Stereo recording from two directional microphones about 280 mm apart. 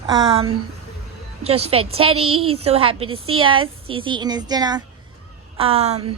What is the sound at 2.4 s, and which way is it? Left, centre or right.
A woman's voice, right.